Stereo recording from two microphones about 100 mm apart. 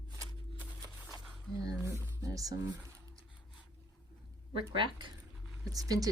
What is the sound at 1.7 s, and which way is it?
Speech, 30° right (ahead or behind).